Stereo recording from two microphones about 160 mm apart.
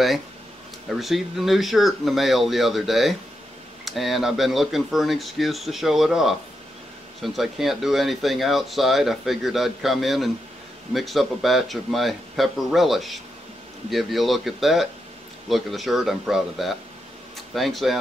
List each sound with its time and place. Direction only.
0.8 s speech: centre (ahead or behind)